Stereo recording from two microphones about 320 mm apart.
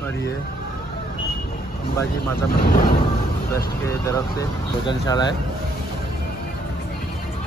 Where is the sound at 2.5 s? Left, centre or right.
Left.